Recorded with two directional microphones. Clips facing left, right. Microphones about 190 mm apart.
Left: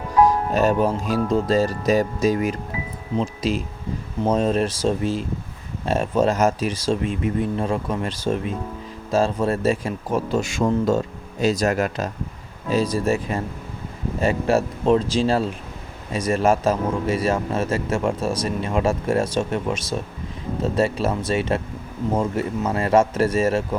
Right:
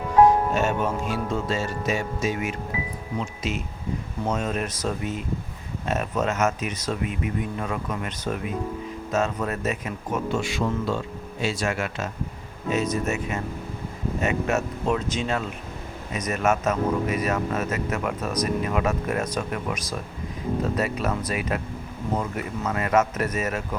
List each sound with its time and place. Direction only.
0.5 s speech: 35° left (ahead or behind)